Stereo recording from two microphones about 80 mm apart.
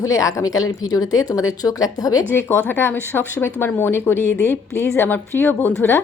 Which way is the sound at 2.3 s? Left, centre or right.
Left.